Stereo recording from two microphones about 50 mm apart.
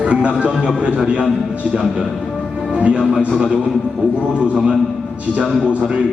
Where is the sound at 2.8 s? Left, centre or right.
Right.